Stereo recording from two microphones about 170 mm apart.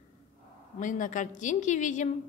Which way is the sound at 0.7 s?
50° left (ahead or behind).